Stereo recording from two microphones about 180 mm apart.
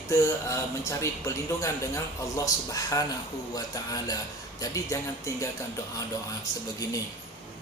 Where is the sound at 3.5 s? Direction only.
20° left (ahead or behind).